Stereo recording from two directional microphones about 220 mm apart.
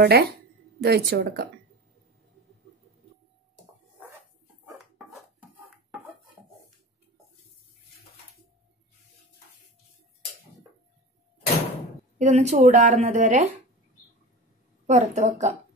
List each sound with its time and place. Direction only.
0.0 s speech: 45° right (ahead or behind)
12.2 s a woman's voice: 30° right (ahead or behind)
14.9 s a woman's voice: 35° right (ahead or behind)